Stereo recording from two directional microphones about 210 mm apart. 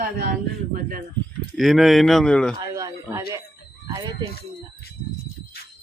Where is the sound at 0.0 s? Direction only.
40° right (ahead or behind).